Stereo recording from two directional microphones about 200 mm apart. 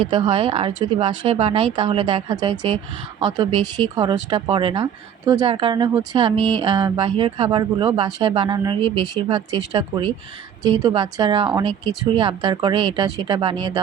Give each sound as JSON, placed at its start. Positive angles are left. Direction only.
{"t": 0.0, "sound": "speech", "side_deg": -25}